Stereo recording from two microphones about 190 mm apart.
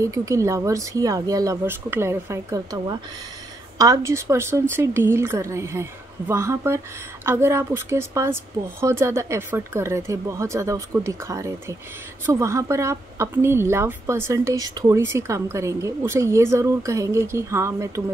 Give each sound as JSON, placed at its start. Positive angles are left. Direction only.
{"t": 0.0, "sound": "a woman's voice", "side_deg": -15}